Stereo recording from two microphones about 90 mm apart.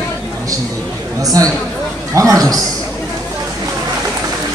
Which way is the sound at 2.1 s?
40° right (ahead or behind).